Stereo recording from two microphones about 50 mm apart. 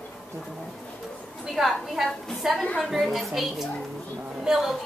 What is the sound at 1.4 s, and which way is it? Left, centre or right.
A woman's voice, centre.